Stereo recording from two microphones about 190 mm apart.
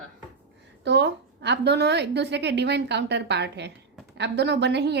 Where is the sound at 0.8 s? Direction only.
65° right (ahead or behind).